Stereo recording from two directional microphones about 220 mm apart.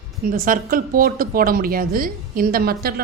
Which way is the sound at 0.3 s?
40° right (ahead or behind).